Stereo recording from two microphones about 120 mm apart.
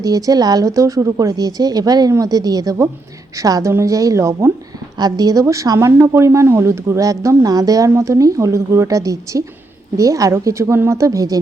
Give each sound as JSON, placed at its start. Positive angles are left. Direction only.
{"t": 0.0, "sound": "a woman's voice", "side_deg": -30}
{"t": 4.9, "sound": "a woman's voice", "side_deg": -35}